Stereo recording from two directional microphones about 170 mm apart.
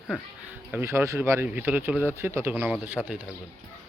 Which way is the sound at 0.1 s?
10° right (ahead or behind).